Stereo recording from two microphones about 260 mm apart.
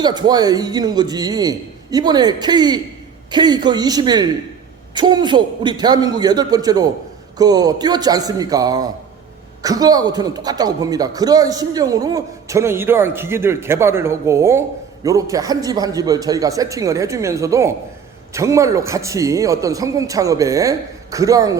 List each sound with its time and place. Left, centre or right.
0.0 s a man's voice: centre